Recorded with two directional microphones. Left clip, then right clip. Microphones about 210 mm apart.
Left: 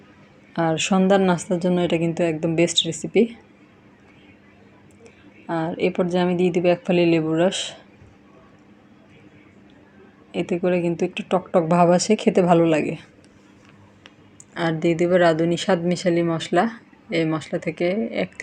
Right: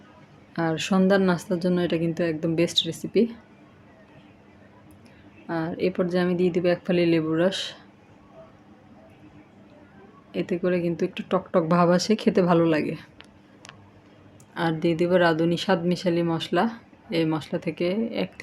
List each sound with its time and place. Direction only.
0.5 s speech: 5° left (ahead or behind)
5.5 s speech: 5° left (ahead or behind)
10.3 s speech: centre (ahead or behind)
14.5 s speech: 5° left (ahead or behind)